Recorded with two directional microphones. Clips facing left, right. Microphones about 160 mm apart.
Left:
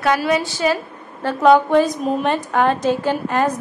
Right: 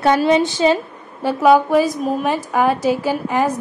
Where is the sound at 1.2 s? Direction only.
5° right (ahead or behind).